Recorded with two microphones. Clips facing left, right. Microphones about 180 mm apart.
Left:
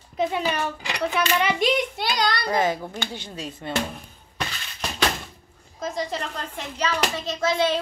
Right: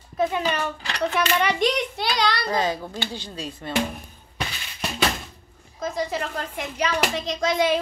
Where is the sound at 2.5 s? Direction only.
20° left (ahead or behind).